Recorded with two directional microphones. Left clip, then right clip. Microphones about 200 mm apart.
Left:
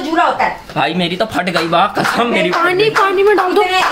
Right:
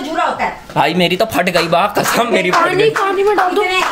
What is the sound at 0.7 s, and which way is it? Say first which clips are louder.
Speech: right 5 dB; 35° right (ahead or behind).